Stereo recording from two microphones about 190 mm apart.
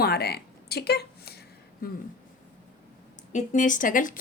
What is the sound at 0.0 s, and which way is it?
Speech, 55° left (ahead or behind).